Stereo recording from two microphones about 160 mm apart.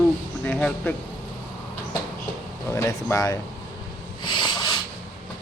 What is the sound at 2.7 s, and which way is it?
Speech, 20° left (ahead or behind).